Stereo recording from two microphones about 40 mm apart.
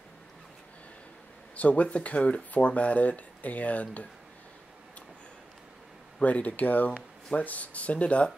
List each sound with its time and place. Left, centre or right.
1.6 s speech: left
6.2 s speech: left